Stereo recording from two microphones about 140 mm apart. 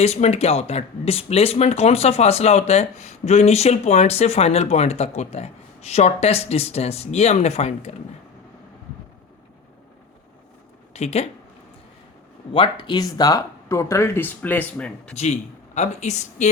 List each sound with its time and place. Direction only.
0.0 s speech: 50° left (ahead or behind)
10.9 s speech: 50° left (ahead or behind)
12.5 s speech: 35° left (ahead or behind); by 15.1 s 10° left (ahead or behind)
15.1 s speech: 55° left (ahead or behind)